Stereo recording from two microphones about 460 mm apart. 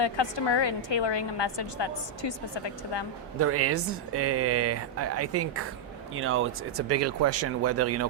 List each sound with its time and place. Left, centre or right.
0.0 s a woman's voice: left
3.3 s speech: right